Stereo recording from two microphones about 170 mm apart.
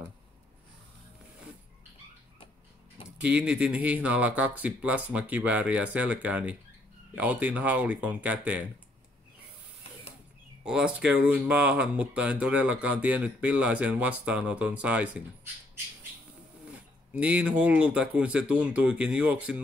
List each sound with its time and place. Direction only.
3.2 s speech: 5° right (ahead or behind)
10.6 s speech: 5° right (ahead or behind)
17.1 s speech: 5° right (ahead or behind)